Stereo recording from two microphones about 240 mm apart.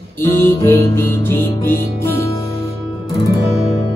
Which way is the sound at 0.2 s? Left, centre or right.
Centre.